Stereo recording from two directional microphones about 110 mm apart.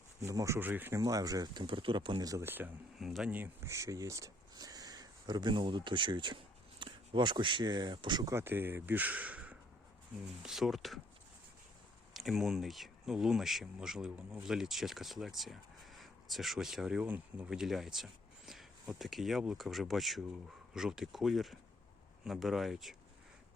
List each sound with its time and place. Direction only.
0.2 s speech: 30° right (ahead or behind)
0.9 s speech: 30° right (ahead or behind)
1.6 s speech: 50° right (ahead or behind)
2.2 s speech: 30° right (ahead or behind)
2.5 s speech: 15° right (ahead or behind)
3.0 s speech: centre (ahead or behind)
3.3 s speech: 20° right (ahead or behind); by 8.3 s 45° right (ahead or behind)
8.3 s speech: 20° right (ahead or behind); by 11.0 s centre (ahead or behind)
12.1 s speech: centre (ahead or behind)